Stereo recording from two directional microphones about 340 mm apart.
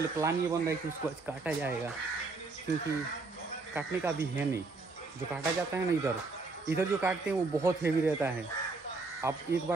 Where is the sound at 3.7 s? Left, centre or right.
Centre.